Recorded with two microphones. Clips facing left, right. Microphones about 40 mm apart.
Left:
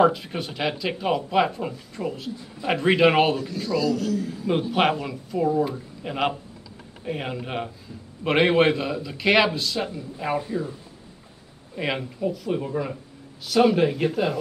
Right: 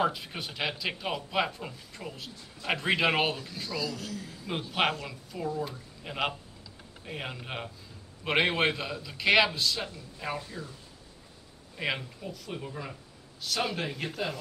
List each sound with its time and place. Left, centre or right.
0.1 s speech: centre
4.3 s speech: centre
9.8 s speech: centre
11.7 s speech: centre